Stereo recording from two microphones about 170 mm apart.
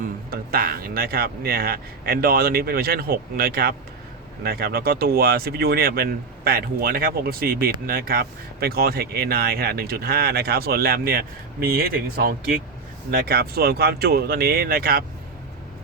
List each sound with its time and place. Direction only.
0.3 s speech: 60° right (ahead or behind)